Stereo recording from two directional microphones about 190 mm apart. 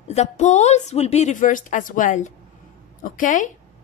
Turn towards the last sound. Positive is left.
turn(degrees=45)  # may be behind; listen again after turning